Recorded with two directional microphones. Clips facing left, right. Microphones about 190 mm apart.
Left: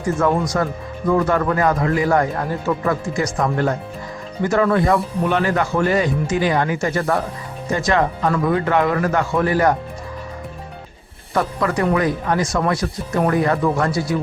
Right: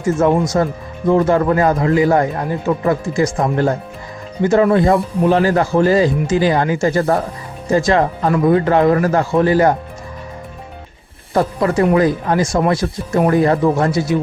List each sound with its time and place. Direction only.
0.0 s speech: 25° right (ahead or behind)
5.2 s speech: 35° right (ahead or behind)
11.3 s speech: 30° right (ahead or behind)